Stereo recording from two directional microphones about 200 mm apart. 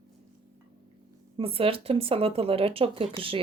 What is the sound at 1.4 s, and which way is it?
Speech, 30° right (ahead or behind).